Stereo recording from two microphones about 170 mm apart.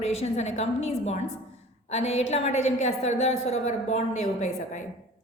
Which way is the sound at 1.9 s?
40° left (ahead or behind).